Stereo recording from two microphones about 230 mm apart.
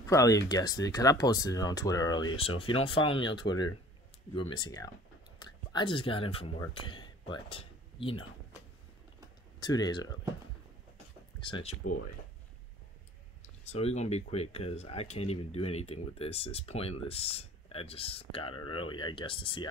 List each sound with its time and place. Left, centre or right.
0.0 s speech: centre
9.6 s speech: centre
11.4 s speech: left
13.7 s speech: left